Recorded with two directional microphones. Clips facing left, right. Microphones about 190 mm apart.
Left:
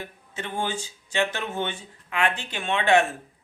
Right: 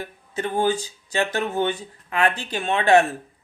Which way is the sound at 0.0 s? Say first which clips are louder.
Right 7 dB; 40° right (ahead or behind).